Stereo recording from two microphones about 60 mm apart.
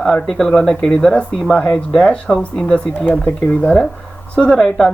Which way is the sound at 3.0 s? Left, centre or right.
Left.